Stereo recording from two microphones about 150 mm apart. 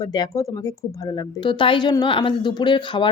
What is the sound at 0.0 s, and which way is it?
Speech, 25° left (ahead or behind).